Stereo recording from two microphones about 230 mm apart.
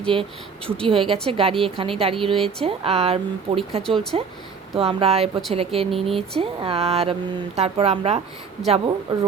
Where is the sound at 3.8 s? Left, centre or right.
Centre.